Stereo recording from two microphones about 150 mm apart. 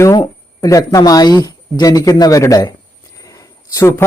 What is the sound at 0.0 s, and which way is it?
Speech, 25° left (ahead or behind).